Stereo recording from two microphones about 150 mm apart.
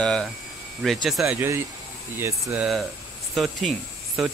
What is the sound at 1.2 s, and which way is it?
Speech, 15° right (ahead or behind).